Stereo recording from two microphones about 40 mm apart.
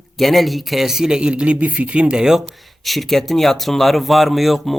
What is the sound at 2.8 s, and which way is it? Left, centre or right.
Speech, centre.